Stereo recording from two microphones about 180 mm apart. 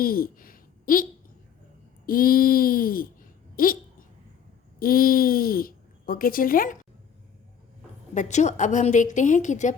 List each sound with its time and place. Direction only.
0.0 s a child's voice: 55° left (ahead or behind)
2.0 s a woman's voice: 55° left (ahead or behind)
4.8 s speech: 55° left (ahead or behind)
8.1 s a woman's voice: 40° left (ahead or behind)